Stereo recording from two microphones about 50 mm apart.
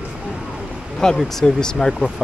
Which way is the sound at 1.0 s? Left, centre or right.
Centre.